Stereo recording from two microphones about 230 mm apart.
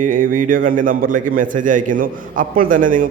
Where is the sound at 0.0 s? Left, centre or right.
Right.